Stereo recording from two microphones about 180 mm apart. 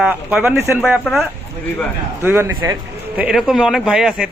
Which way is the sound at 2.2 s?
15° right (ahead or behind).